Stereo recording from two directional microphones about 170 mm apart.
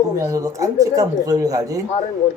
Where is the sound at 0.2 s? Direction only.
20° right (ahead or behind).